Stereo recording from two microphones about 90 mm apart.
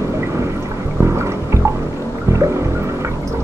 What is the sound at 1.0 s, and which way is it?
Music, 30° right (ahead or behind).